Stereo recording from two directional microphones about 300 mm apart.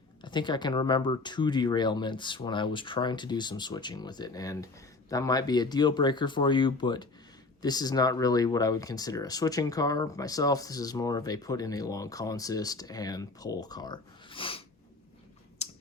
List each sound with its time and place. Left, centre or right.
0.2 s speech: centre
15.6 s computer keyboard: left